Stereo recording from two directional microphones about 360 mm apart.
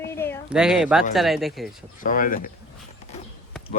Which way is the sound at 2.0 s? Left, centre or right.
Left.